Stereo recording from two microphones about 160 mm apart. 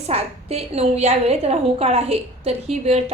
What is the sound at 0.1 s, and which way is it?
A woman's voice, 40° right (ahead or behind).